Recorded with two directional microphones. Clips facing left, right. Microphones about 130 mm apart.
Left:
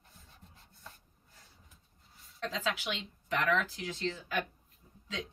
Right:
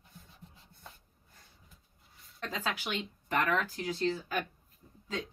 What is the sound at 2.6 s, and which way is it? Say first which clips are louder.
Speech: right 1 dB; 45° right (ahead or behind).